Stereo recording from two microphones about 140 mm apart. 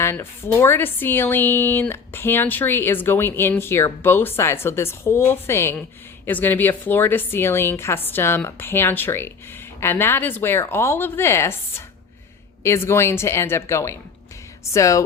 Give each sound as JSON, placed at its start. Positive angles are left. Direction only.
{"t": 0.0, "sound": "a woman's voice", "side_deg": 20}